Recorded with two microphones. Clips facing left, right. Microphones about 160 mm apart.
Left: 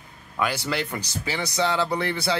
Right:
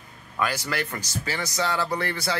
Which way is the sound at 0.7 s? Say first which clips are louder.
Left 2 dB; 20° left (ahead or behind).